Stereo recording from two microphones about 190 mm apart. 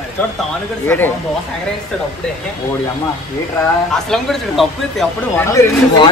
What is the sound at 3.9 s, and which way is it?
Speech, centre (ahead or behind).